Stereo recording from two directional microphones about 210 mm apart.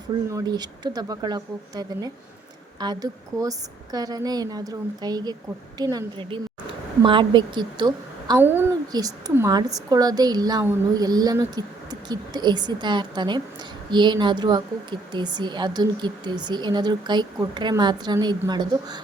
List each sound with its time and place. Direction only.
0.3 s a woman's voice: 15° right (ahead or behind)